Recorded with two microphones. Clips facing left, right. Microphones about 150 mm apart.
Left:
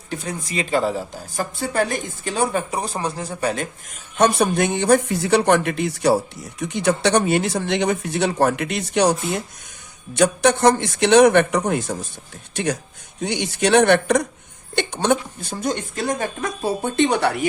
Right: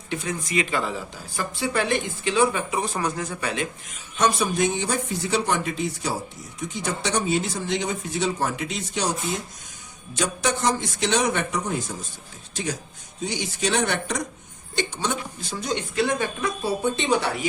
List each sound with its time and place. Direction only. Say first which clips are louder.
0.1 s speech: even; 35° left (ahead or behind)
4.2 s speech: left 4 dB; 60° left (ahead or behind)